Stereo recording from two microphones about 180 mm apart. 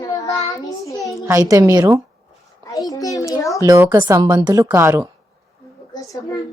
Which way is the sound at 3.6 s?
20° right (ahead or behind).